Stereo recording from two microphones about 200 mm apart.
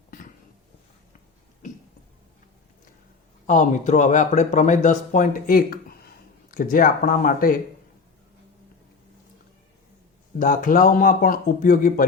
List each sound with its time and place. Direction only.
3.4 s speech: 40° left (ahead or behind)
10.3 s speech: 45° left (ahead or behind)